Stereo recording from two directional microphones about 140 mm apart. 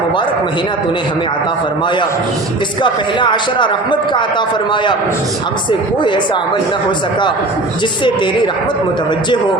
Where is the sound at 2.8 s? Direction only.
35° left (ahead or behind).